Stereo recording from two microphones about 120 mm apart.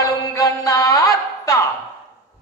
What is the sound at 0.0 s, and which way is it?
Music, 30° left (ahead or behind).